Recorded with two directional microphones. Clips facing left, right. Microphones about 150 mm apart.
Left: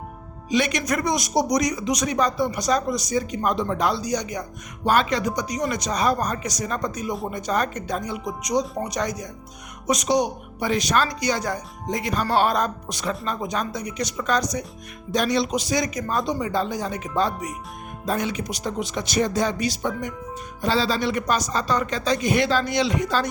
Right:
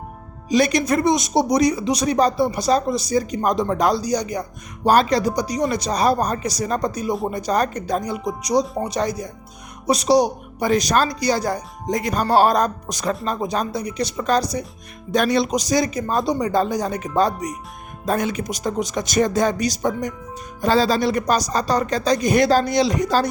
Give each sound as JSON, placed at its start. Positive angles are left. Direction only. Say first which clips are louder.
{"t": 0.4, "sound": "speech", "louder": "right 5 dB", "side_deg": -40}
{"t": 15.1, "sound": "speech", "louder": "right 3 dB", "side_deg": -55}